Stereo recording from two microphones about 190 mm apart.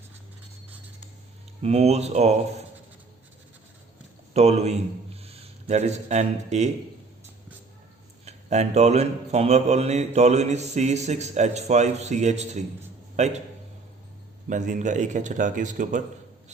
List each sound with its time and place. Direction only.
1.6 s speech: 35° right (ahead or behind)
4.4 s speech: 35° right (ahead or behind)
8.2 s a man's voice: 35° right (ahead or behind)
14.5 s speech: 40° right (ahead or behind)